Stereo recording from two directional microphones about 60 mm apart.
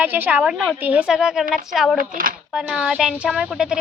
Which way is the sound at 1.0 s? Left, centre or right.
Centre.